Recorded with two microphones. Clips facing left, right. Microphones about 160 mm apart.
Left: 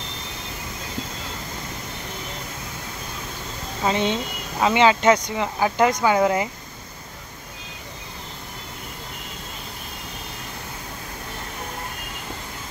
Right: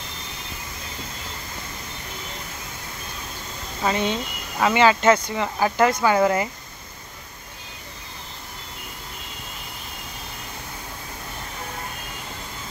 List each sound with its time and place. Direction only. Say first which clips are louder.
3.8 s speech: left 1 dB; 20° left (ahead or behind)